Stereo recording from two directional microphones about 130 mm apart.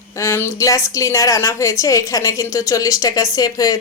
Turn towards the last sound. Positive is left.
turn(degrees=30)  # may be behind; listen again after turning